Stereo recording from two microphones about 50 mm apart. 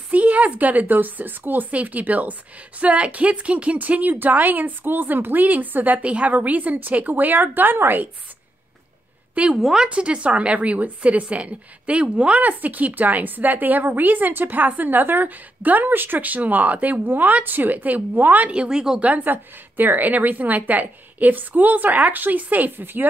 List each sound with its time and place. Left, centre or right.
0.1 s a woman's voice: right
9.6 s a woman's voice: centre
9.8 s a woman's voice: right
18.5 s speech: right
19.2 s a woman's voice: right